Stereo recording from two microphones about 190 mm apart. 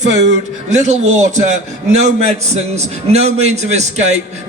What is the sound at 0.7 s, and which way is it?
Speech, 40° right (ahead or behind).